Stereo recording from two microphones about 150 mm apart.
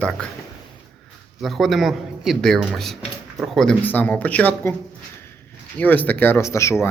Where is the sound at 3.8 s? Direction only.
10° left (ahead or behind).